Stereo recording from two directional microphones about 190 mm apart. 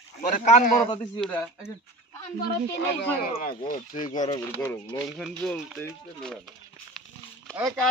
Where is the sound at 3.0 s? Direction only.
50° left (ahead or behind).